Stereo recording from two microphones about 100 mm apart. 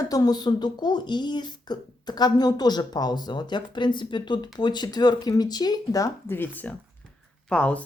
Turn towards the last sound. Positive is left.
turn(degrees=10)  # may be behind; listen again after turning